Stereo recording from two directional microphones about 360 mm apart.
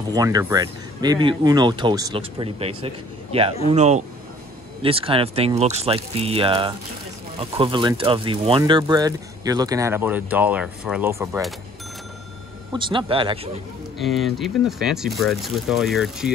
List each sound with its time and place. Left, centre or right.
0.1 s a man's voice: centre
12.7 s speech: centre
13.9 s speech: centre